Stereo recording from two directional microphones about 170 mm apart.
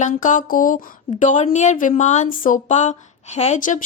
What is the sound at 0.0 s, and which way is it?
Speech, 50° left (ahead or behind).